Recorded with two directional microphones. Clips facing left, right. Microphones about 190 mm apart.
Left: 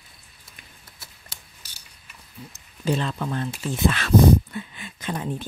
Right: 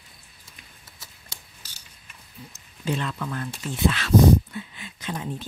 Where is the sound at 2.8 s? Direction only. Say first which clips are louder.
Left 3 dB; 35° left (ahead or behind).